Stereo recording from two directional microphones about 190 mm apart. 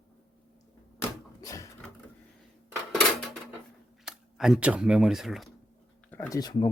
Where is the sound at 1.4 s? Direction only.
20° left (ahead or behind).